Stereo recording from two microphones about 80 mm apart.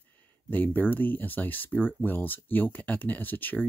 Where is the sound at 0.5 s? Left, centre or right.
Left.